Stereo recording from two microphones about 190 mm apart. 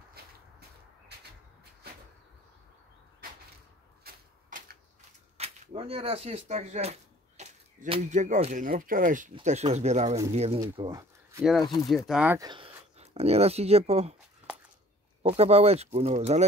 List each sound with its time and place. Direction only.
0.1 s a sound: 55° right (ahead or behind)
4.0 s a sound: 45° right (ahead or behind)
5.4 s speech: 30° right (ahead or behind)
10.6 s speech: 20° right (ahead or behind)
12.1 s speech: 5° right (ahead or behind)
12.4 s speech: 25° right (ahead or behind)
15.2 s speech: 35° right (ahead or behind)